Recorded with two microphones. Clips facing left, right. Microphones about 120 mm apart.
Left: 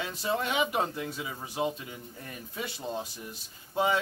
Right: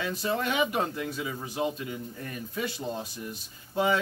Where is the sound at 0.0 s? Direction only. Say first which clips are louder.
Right 2 dB; 20° left (ahead or behind).